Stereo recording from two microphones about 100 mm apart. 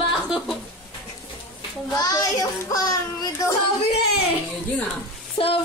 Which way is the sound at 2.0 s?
35° left (ahead or behind).